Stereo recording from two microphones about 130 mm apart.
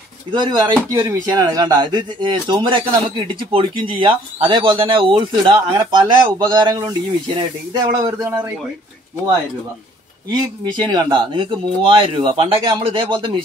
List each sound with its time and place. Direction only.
0.3 s speech: 35° right (ahead or behind)
8.3 s speech: 10° right (ahead or behind)
10.3 s speech: 35° right (ahead or behind)